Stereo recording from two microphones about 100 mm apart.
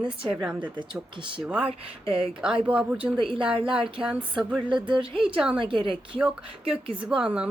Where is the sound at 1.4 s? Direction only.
15° right (ahead or behind).